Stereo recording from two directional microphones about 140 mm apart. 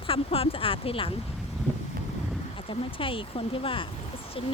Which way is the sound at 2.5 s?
40° left (ahead or behind).